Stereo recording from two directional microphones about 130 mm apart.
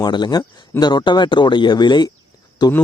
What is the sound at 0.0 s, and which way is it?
Speech, 35° left (ahead or behind).